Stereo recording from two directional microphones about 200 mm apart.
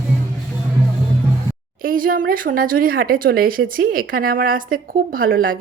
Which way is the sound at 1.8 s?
45° right (ahead or behind).